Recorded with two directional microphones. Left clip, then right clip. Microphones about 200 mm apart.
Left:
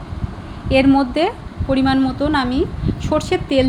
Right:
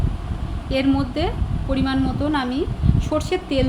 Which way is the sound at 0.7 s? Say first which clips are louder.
Left 7 dB; 15° left (ahead or behind).